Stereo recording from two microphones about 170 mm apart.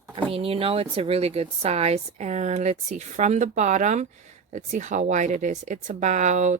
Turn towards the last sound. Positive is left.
turn(degrees=-45)  # may be behind; listen again after turning